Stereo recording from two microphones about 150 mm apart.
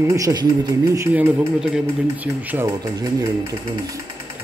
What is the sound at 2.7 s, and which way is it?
Speech, 25° right (ahead or behind).